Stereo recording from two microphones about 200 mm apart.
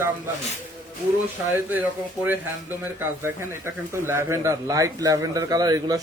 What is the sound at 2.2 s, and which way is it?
Speech, 10° right (ahead or behind).